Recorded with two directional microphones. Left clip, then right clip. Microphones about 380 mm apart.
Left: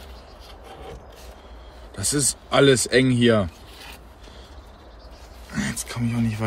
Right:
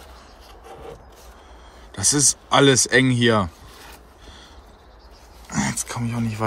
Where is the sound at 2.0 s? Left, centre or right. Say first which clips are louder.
Right 5 dB; centre.